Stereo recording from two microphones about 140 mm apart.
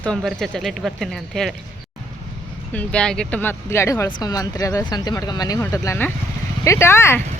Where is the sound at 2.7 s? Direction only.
10° left (ahead or behind).